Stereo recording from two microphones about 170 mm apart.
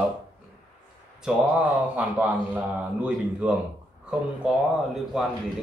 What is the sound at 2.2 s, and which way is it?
Speech, 10° right (ahead or behind).